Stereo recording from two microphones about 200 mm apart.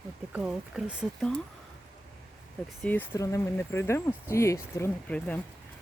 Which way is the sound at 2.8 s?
10° left (ahead or behind).